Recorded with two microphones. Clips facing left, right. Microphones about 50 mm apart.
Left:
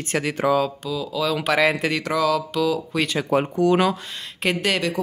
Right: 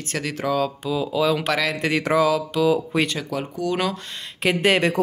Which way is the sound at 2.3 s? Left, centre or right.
Centre.